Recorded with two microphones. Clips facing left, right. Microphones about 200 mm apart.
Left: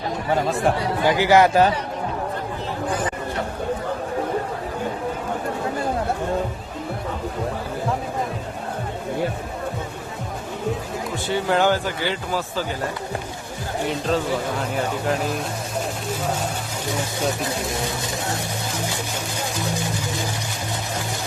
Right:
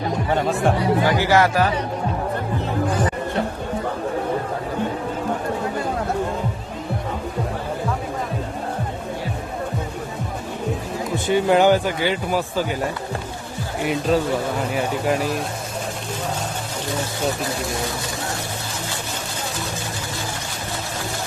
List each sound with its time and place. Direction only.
0.3 s speech: centre (ahead or behind)
1.0 s speech: 20° left (ahead or behind)
11.1 s speech: 15° right (ahead or behind)
14.1 s speech: 5° right (ahead or behind)
19.5 s music: 15° left (ahead or behind)